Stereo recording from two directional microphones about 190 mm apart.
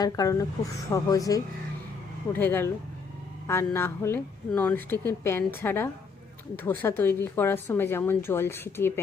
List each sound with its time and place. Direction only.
0.0 s a woman's voice: 20° left (ahead or behind)